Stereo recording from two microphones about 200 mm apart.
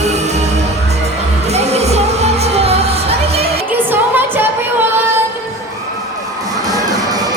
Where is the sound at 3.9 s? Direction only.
10° right (ahead or behind).